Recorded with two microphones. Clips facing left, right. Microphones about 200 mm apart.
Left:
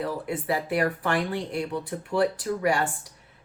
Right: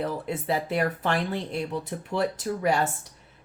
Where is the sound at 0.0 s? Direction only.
25° right (ahead or behind).